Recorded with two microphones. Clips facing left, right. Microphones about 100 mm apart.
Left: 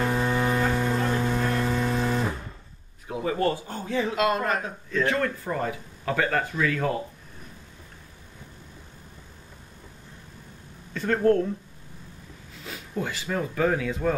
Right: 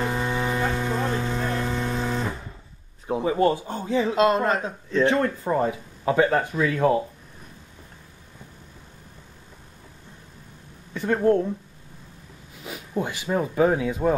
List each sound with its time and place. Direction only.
0.0 s a sound: centre (ahead or behind)
3.1 s a man's voice: 25° right (ahead or behind)
10.9 s speech: 15° right (ahead or behind)
12.6 s a man's voice: 20° right (ahead or behind)